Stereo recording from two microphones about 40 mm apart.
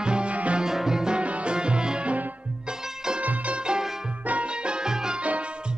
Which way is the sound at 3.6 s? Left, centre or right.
Centre.